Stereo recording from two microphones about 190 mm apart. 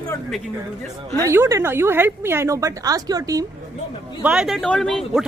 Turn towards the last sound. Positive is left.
turn(degrees=0)  # may be behind; listen again after turning